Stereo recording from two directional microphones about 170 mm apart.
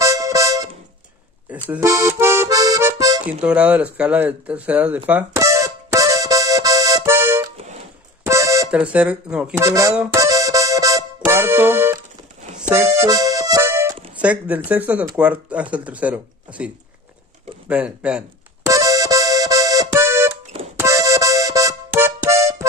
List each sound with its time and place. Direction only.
0.0 s music: 20° right (ahead or behind)
1.5 s accordion: 15° right (ahead or behind)
3.3 s a sound: 10° right (ahead or behind)
8.3 s music: 15° right (ahead or behind)
8.6 s speech: 5° right (ahead or behind)
9.5 s speech: 20° right (ahead or behind)
10.1 s music: 20° right (ahead or behind)
12.5 s accordion: 10° right (ahead or behind)
13.0 s accordion: 20° right (ahead or behind)
14.1 s speech: 10° right (ahead or behind)
18.7 s music: 20° right (ahead or behind)